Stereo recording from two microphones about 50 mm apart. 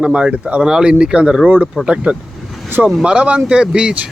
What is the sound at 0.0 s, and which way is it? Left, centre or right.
Speech, right.